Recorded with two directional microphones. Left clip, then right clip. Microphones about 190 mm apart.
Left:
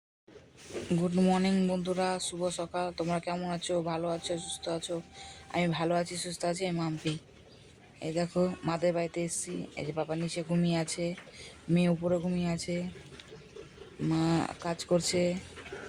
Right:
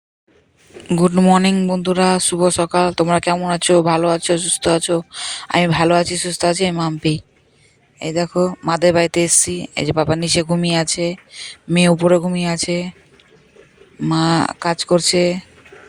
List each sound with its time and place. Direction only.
0.9 s speech: 50° right (ahead or behind)
14.1 s speech: 50° right (ahead or behind)